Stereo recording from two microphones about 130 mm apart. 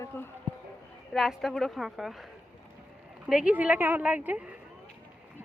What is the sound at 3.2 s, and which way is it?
Speech, 10° right (ahead or behind).